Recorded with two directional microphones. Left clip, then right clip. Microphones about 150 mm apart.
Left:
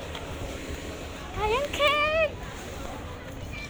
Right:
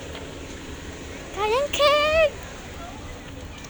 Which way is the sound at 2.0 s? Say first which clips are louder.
Right 5 dB; 25° right (ahead or behind).